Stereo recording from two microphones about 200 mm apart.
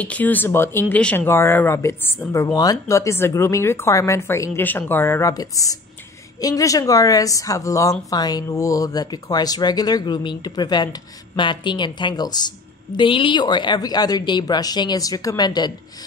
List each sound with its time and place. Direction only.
0.0 s speech: 10° left (ahead or behind)